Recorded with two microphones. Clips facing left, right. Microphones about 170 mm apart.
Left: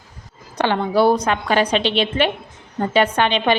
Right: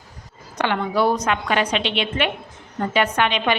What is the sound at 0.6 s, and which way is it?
A woman's voice, 30° left (ahead or behind).